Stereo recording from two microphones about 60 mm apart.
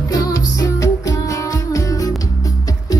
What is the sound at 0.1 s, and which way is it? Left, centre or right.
Music, left.